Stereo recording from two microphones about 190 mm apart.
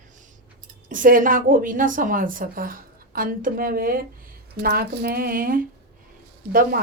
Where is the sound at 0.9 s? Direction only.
45° right (ahead or behind).